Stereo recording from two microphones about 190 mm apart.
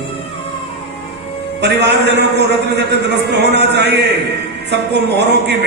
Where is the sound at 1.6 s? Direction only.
60° right (ahead or behind).